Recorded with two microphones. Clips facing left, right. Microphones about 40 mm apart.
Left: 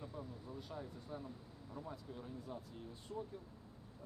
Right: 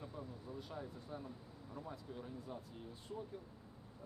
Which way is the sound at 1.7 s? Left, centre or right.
Centre.